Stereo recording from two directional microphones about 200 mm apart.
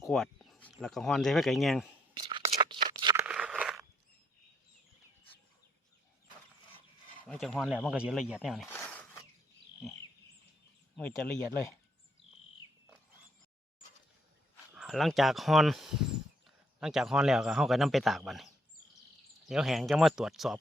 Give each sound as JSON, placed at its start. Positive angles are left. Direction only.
{"t": 0.0, "sound": "speech", "side_deg": 0}
{"t": 2.1, "sound": "tearing", "side_deg": -20}
{"t": 3.2, "sound": "crunch", "side_deg": -5}
{"t": 7.3, "sound": "speech", "side_deg": 0}
{"t": 8.6, "sound": "a sound", "side_deg": 10}
{"t": 10.9, "sound": "speech", "side_deg": 5}
{"t": 14.7, "sound": "speech", "side_deg": 0}
{"t": 19.5, "sound": "speech", "side_deg": 0}